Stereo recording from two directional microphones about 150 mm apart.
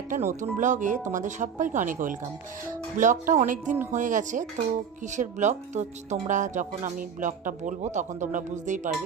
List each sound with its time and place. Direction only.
0.1 s speech: 60° right (ahead or behind)